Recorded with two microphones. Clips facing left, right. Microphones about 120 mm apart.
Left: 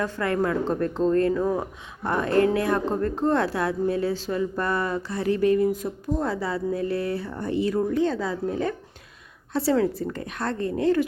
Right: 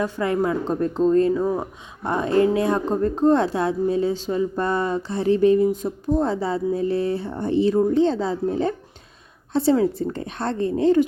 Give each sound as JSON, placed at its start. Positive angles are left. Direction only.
{"t": 0.0, "sound": "a woman's voice", "side_deg": -15}